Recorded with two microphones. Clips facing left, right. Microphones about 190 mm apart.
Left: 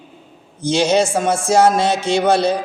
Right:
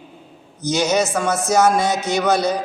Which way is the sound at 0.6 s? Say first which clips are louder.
Left 3 dB; 30° left (ahead or behind).